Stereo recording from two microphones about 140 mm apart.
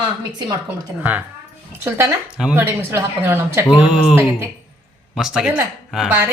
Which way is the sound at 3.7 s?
5° right (ahead or behind).